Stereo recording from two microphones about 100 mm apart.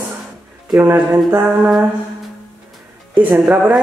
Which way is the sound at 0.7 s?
20° right (ahead or behind).